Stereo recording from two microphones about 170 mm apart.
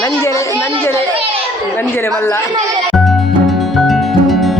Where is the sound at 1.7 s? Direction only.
15° left (ahead or behind).